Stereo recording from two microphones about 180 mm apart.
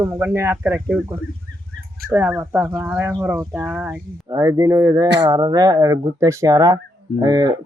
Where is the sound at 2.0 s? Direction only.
15° right (ahead or behind).